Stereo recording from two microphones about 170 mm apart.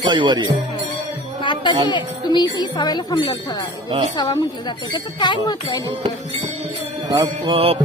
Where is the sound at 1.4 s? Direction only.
25° left (ahead or behind).